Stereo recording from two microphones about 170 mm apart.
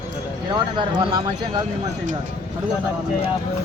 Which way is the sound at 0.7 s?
30° right (ahead or behind).